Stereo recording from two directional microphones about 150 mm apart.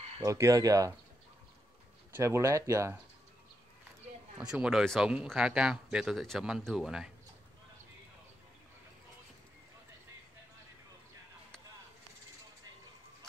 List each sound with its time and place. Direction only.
0.2 s speech: 20° right (ahead or behind)
2.1 s speech: 20° right (ahead or behind)
4.4 s speech: 5° right (ahead or behind)